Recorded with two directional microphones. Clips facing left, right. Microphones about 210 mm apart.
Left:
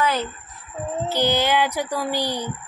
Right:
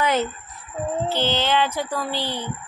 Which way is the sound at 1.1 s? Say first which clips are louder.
Left 4 dB; 15° left (ahead or behind).